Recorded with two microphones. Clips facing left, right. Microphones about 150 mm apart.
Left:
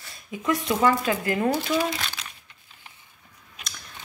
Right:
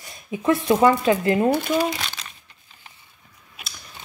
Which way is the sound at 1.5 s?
50° right (ahead or behind).